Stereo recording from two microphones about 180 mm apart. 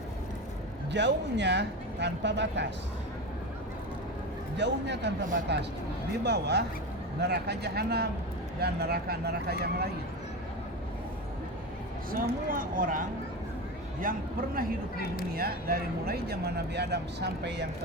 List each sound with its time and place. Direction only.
0.9 s speech: 75° right (ahead or behind)
4.5 s speech: 75° right (ahead or behind)
12.1 s speech: 50° right (ahead or behind)
15.4 s speech: 55° right (ahead or behind)